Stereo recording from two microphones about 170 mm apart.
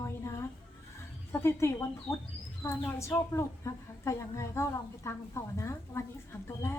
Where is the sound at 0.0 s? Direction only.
15° left (ahead or behind).